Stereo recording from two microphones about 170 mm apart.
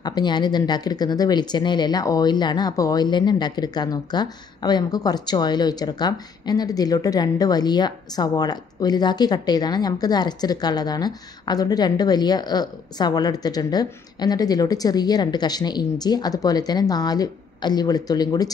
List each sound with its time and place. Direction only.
0.0 s speech: 25° left (ahead or behind)